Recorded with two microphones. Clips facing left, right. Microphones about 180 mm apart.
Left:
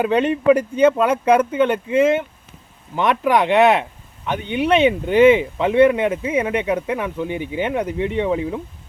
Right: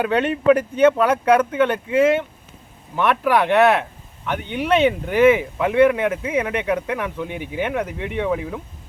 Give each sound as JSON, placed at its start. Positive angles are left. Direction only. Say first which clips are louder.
{"t": 0.0, "sound": "speech", "louder": "left 2 dB", "side_deg": 10}
{"t": 2.9, "sound": "speech", "louder": "left 1 dB", "side_deg": 15}